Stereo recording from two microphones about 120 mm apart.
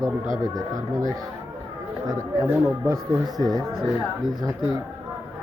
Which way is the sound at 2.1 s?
25° right (ahead or behind).